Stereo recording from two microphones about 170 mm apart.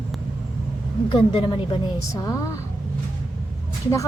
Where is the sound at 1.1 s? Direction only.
30° left (ahead or behind).